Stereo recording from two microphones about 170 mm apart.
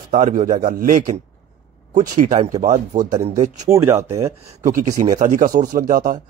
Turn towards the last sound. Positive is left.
turn(degrees=-55)  # may be behind; listen again after turning